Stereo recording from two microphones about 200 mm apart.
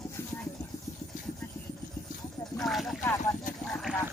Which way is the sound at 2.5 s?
Centre (ahead or behind).